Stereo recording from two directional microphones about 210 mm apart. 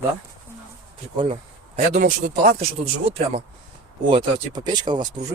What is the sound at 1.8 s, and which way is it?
Speech, 35° right (ahead or behind).